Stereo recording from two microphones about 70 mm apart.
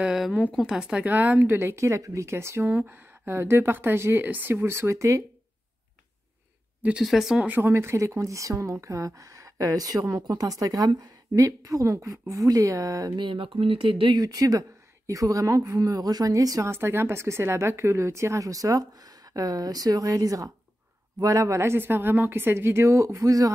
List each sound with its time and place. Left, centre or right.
0.0 s speech: centre; by 5.2 s right
7.0 s speech: centre
7.6 s a woman's voice: right
14.1 s speech: right
16.7 s speech: right